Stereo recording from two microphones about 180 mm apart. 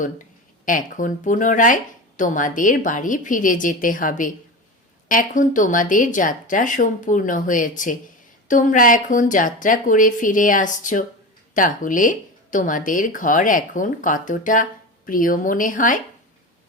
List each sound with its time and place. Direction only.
0.6 s speech: 50° left (ahead or behind)